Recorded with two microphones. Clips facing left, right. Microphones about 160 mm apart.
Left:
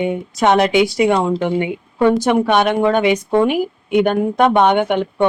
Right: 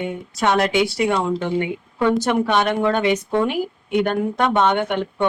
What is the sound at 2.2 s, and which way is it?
A woman's voice, 15° left (ahead or behind).